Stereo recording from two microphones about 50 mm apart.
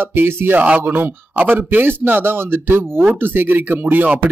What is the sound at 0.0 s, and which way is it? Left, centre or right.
A man's voice, right.